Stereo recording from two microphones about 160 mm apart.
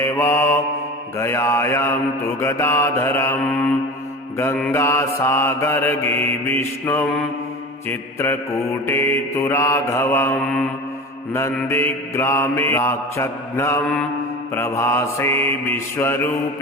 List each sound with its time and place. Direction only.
0.0 s mantra: 15° left (ahead or behind)